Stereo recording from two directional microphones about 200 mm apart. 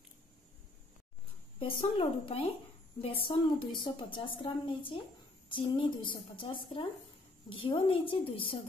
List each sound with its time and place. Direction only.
1.6 s a woman's voice: 25° left (ahead or behind)